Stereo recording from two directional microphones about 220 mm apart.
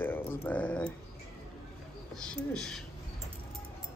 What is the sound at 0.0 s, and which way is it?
Speech, 10° left (ahead or behind).